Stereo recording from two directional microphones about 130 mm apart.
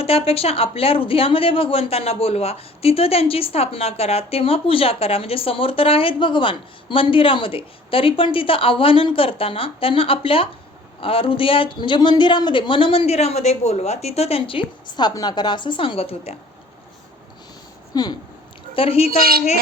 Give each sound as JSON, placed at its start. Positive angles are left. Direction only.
{"t": 0.0, "sound": "speech", "side_deg": 50}
{"t": 17.9, "sound": "speech", "side_deg": 30}
{"t": 18.7, "sound": "speech", "side_deg": 45}